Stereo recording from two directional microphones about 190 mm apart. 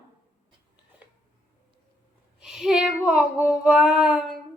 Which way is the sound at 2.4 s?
5° right (ahead or behind).